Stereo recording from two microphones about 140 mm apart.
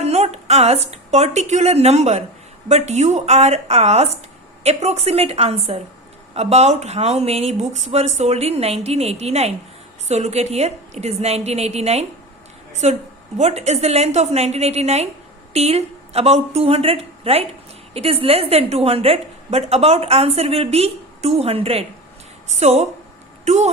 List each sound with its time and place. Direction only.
0.0 s a woman's voice: 50° right (ahead or behind)
22.4 s a woman's voice: 55° right (ahead or behind)